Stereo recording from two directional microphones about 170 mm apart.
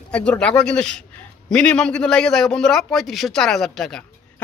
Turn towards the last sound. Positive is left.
turn(degrees=0)  # may be behind; listen again after turning